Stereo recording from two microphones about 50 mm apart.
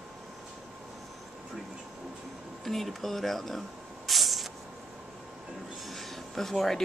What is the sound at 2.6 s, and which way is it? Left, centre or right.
Speech, centre.